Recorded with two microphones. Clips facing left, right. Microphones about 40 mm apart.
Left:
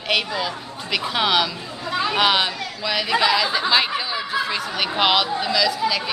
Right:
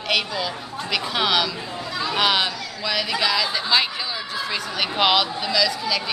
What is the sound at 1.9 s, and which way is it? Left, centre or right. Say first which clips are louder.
Chatter: left 5 dB; left.